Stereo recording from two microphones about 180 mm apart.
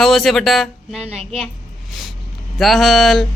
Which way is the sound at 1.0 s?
35° right (ahead or behind).